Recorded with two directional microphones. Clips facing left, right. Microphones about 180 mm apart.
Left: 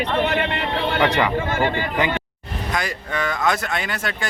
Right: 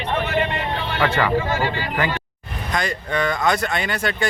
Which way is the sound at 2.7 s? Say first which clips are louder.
Right 3 dB; 5° left (ahead or behind).